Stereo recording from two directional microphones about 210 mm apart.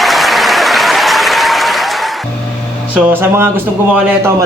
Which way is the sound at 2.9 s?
10° right (ahead or behind).